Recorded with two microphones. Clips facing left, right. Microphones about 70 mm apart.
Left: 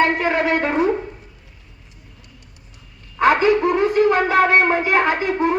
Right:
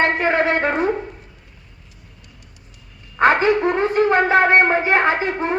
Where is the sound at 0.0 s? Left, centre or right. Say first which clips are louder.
Even; right.